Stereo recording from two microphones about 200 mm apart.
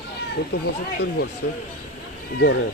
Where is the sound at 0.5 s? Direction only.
55° left (ahead or behind).